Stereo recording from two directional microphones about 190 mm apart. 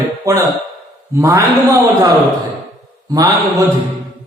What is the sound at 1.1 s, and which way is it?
Mantra, 15° right (ahead or behind).